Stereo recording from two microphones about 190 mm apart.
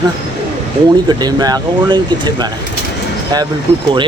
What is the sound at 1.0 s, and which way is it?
Speech, 20° right (ahead or behind).